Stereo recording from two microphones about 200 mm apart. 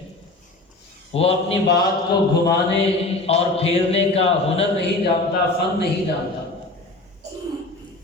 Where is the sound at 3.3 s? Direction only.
30° left (ahead or behind).